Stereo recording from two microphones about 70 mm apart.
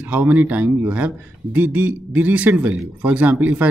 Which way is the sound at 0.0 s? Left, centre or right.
Right.